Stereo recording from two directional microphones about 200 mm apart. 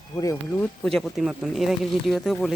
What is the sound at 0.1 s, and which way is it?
Speech, 15° left (ahead or behind).